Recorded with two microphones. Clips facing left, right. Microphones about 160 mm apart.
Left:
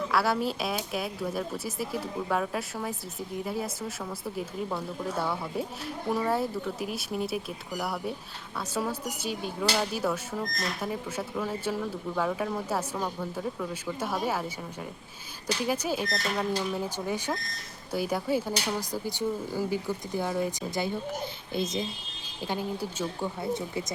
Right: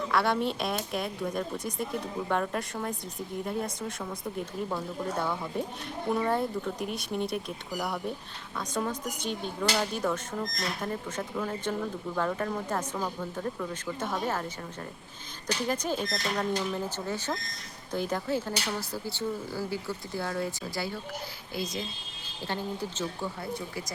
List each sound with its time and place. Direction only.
0.1 s speech: 5° left (ahead or behind)
15.6 s speech: 10° left (ahead or behind)
22.4 s speech: 10° left (ahead or behind)
23.4 s speech: 25° left (ahead or behind)